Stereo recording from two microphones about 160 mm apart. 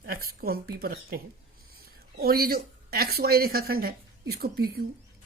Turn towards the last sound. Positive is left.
turn(degrees=-75)  # may be behind; listen again after turning